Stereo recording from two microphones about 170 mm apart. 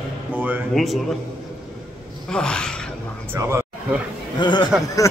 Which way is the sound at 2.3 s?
5° left (ahead or behind).